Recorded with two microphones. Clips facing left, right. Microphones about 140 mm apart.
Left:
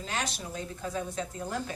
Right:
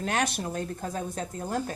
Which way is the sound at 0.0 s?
60° right (ahead or behind).